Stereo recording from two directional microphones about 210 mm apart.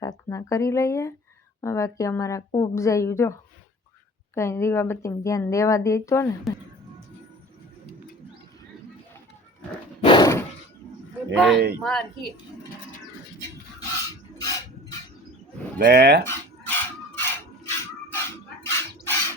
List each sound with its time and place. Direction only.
0.0 s speech: 15° left (ahead or behind)
4.4 s speech: 15° left (ahead or behind)
6.5 s a woman's voice: centre (ahead or behind)
10.0 s a sound: 20° left (ahead or behind)
11.5 s speech: 50° right (ahead or behind)
11.8 s a woman's voice: centre (ahead or behind)
13.7 s a sound: 15° left (ahead or behind)
15.8 s speech: 50° right (ahead or behind)
16.2 s dog: 10° left (ahead or behind)
18.1 s a sound: 10° left (ahead or behind)